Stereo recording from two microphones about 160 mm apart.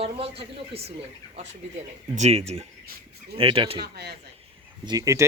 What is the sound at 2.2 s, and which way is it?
Speech, 40° right (ahead or behind).